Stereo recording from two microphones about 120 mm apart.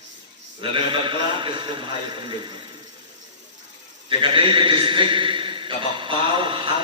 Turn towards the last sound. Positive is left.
turn(degrees=-45)  # may be behind; listen again after turning